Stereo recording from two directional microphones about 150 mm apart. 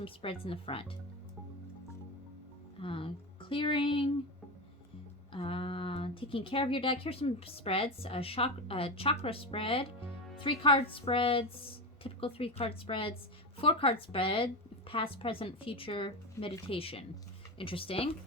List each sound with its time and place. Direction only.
0.0 s speech: 35° left (ahead or behind)
2.7 s speech: 35° left (ahead or behind)
5.3 s speech: 35° left (ahead or behind)